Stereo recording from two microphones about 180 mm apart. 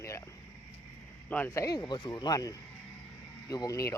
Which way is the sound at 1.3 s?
10° left (ahead or behind).